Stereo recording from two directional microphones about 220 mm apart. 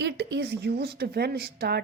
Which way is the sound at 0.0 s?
50° right (ahead or behind).